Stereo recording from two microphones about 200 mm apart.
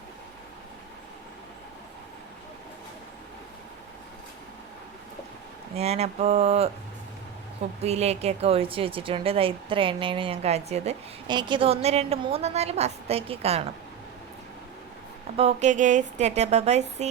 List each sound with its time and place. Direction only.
5.7 s a woman's voice: 30° right (ahead or behind)
7.8 s a woman's voice: 35° right (ahead or behind)
15.4 s a woman's voice: 35° right (ahead or behind)